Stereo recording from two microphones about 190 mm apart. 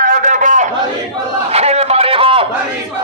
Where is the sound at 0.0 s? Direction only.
45° right (ahead or behind).